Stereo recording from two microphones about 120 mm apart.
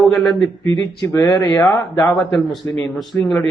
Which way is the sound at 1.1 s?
25° left (ahead or behind).